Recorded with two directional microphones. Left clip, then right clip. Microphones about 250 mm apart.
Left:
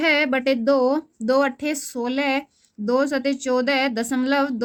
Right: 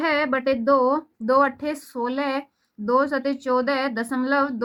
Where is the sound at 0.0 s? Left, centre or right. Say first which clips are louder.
Left 2 dB; left.